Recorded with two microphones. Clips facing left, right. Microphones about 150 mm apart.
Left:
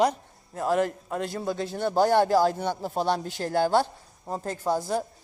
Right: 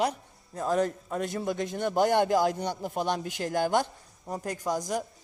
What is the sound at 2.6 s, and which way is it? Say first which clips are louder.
Speech: left 3 dB; 50° left (ahead or behind).